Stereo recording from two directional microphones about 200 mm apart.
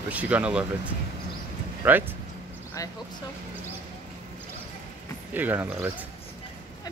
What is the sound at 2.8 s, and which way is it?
Speech, 15° left (ahead or behind).